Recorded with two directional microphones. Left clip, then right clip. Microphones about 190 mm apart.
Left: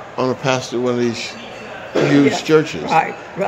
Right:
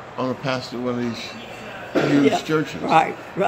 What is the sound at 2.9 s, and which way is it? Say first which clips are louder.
Speech: left 1 dB; 50° right (ahead or behind).